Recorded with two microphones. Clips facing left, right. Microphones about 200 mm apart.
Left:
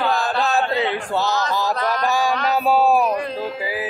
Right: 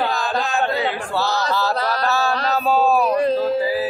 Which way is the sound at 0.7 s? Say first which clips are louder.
Left 1 dB; 20° left (ahead or behind).